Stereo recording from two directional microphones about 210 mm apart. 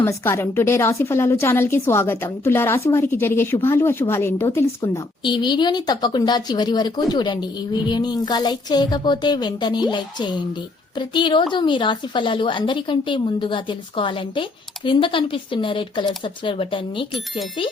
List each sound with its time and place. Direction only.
0.0 s a woman's voice: 15° left (ahead or behind)